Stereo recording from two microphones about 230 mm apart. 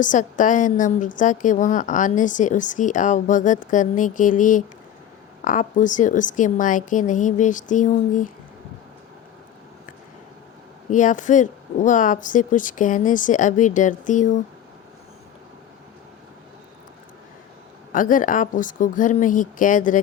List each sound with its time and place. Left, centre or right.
0.0 s a woman's voice: left
10.8 s a woman's voice: left
17.9 s a woman's voice: left